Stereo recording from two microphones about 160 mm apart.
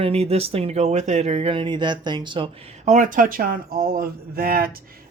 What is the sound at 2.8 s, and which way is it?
Speech, 50° right (ahead or behind).